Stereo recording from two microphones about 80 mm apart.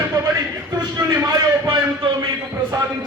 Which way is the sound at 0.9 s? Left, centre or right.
Right.